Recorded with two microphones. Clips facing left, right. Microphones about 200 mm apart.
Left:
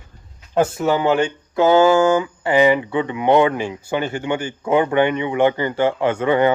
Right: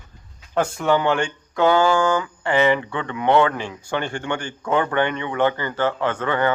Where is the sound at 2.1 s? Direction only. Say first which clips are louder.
Left 4 dB; 10° left (ahead or behind).